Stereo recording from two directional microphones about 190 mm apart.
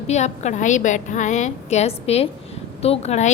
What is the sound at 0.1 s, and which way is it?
A woman's voice, 35° left (ahead or behind).